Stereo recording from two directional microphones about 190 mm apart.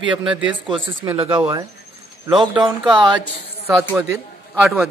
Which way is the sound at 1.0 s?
20° right (ahead or behind).